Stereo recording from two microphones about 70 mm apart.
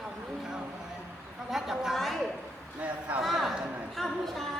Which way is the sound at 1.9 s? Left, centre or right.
Centre.